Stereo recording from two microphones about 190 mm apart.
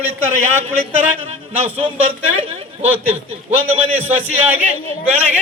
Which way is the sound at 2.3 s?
35° right (ahead or behind).